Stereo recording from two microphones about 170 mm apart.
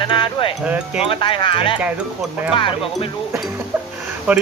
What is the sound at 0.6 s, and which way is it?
Speech, 10° right (ahead or behind).